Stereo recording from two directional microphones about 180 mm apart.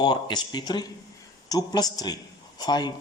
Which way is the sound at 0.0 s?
25° left (ahead or behind).